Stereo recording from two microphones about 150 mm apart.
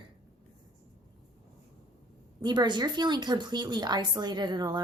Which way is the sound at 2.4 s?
30° right (ahead or behind).